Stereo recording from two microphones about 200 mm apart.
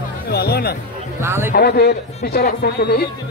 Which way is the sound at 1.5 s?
55° left (ahead or behind).